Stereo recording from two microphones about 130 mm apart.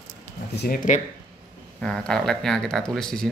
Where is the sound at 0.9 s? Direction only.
80° left.